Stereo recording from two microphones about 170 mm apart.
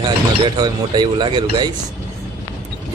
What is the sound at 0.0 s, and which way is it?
Speech, 25° right (ahead or behind).